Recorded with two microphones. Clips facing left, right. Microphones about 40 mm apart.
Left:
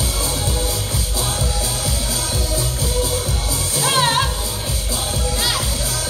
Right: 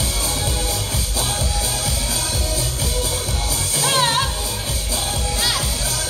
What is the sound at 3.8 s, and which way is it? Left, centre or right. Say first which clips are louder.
Music: left 1 dB; centre.